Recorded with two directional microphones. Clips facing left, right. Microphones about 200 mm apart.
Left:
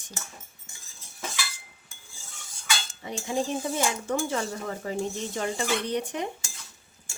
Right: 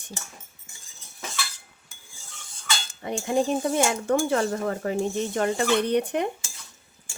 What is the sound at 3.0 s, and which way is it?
Speech, 60° right (ahead or behind).